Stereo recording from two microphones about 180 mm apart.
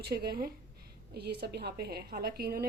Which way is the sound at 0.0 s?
60° right (ahead or behind).